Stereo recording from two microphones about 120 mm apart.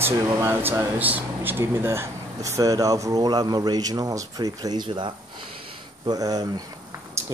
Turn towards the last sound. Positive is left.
turn(degrees=-30)  # may be behind; listen again after turning